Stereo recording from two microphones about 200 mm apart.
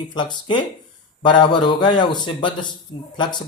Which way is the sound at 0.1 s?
20° left (ahead or behind).